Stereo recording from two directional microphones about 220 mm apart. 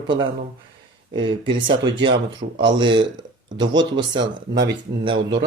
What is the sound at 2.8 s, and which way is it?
Speech, 20° right (ahead or behind).